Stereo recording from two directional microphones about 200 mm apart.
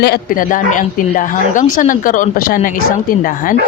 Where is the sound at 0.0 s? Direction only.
50° left (ahead or behind).